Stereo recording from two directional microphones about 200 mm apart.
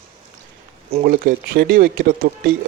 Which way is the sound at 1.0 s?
50° right (ahead or behind).